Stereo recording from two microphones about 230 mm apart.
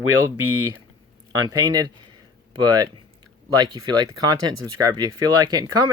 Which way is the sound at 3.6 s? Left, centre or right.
Centre.